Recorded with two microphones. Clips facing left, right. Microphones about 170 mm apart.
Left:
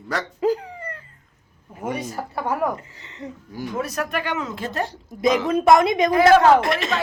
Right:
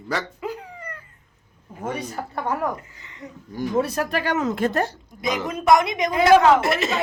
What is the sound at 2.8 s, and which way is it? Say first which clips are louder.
Speech: left 3 dB; 30° left (ahead or behind).